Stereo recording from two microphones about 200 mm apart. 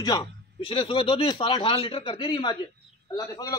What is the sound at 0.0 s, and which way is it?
Speech, 20° left (ahead or behind).